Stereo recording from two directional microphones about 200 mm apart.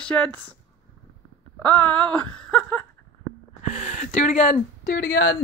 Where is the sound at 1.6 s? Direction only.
5° left (ahead or behind).